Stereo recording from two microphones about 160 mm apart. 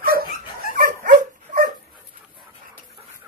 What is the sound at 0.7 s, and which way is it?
Dog, 55° right (ahead or behind).